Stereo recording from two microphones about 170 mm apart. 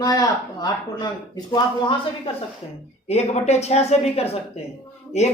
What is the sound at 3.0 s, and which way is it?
A woman's voice, 40° left (ahead or behind).